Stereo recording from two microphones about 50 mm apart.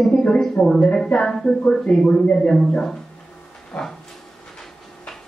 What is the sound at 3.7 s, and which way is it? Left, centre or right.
Speech, centre.